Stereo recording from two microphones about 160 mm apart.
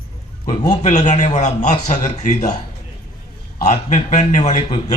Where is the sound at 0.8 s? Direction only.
50° left (ahead or behind).